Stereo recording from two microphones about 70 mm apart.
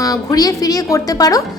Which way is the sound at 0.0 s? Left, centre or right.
Left.